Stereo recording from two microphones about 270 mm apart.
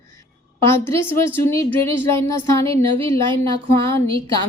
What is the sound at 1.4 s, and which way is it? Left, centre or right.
A woman's voice, centre.